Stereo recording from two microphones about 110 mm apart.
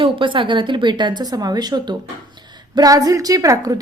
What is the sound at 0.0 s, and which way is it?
A woman's voice, 50° right (ahead or behind).